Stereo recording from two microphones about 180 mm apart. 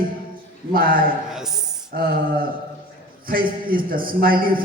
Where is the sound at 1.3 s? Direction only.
Centre (ahead or behind).